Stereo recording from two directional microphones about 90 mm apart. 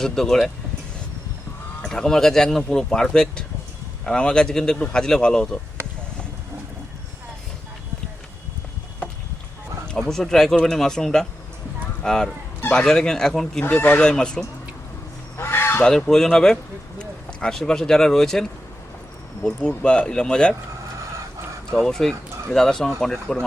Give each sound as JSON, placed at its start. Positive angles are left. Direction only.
{"t": 0.0, "sound": "speech", "side_deg": 5}
{"t": 1.8, "sound": "speech", "side_deg": 5}
{"t": 9.9, "sound": "speech", "side_deg": 5}
{"t": 13.6, "sound": "speech", "side_deg": 20}
{"t": 15.4, "sound": "a sound", "side_deg": 25}
{"t": 15.8, "sound": "speech", "side_deg": 5}
{"t": 21.7, "sound": "speech", "side_deg": 5}